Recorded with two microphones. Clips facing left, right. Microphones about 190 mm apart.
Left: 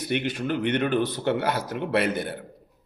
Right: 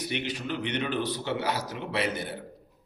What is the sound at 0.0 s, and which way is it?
A man's voice, 50° left (ahead or behind).